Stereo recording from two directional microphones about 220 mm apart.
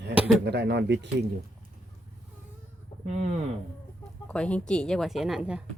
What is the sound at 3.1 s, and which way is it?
Speech, 30° right (ahead or behind).